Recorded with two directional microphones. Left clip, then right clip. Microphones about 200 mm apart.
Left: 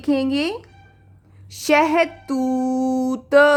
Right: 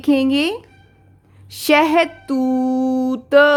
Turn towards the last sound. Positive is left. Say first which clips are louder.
# right 2 dB
turn(degrees=-10)  # may be behind; listen again after turning